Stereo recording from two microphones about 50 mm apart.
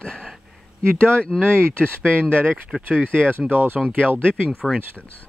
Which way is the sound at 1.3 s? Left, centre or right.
Centre.